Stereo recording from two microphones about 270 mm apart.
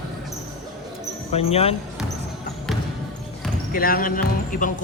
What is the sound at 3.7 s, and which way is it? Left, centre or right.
Speech, left.